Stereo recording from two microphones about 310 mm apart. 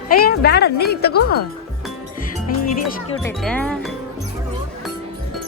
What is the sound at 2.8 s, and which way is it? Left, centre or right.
Speech, centre.